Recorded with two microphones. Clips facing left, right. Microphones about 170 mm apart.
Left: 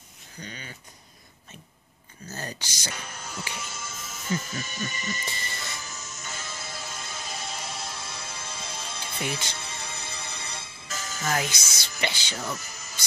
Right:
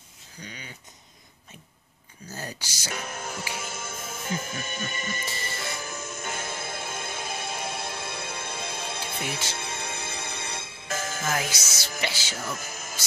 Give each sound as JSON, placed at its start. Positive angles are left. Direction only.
{"t": 0.4, "sound": "speech", "side_deg": -10}
{"t": 2.2, "sound": "speech", "side_deg": -10}
{"t": 2.9, "sound": "music", "side_deg": -55}
{"t": 3.5, "sound": "speech", "side_deg": -55}
{"t": 5.8, "sound": "music", "side_deg": -55}
{"t": 11.3, "sound": "music", "side_deg": -5}
{"t": 12.5, "sound": "music", "side_deg": -50}